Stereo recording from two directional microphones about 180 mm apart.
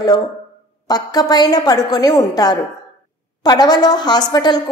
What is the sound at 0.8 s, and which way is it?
A woman's voice, 20° left (ahead or behind).